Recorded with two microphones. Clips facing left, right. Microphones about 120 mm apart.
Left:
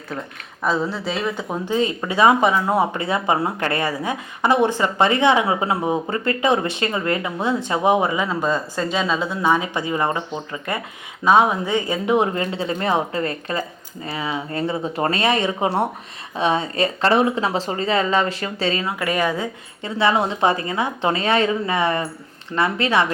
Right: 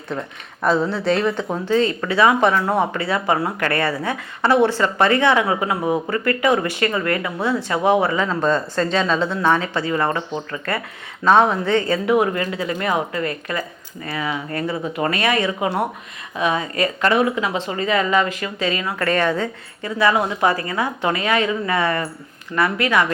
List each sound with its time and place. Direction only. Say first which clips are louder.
0.6 s speech: right 3 dB; centre (ahead or behind); by 18.9 s 30° left (ahead or behind)
18.9 s speech: right 2 dB; 10° left (ahead or behind)
19.8 s speech: right 1 dB; 25° left (ahead or behind)